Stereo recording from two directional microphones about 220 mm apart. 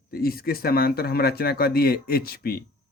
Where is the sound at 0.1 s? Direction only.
45° left (ahead or behind).